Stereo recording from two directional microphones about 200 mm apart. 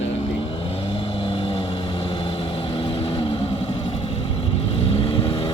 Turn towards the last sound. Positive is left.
turn(degrees=25)  # may be behind; listen again after turning